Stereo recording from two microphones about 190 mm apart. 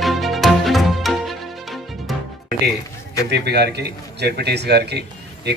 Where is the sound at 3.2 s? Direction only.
60° right (ahead or behind).